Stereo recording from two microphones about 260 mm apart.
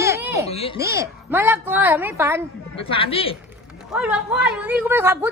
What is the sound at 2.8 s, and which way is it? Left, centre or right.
Speech, left.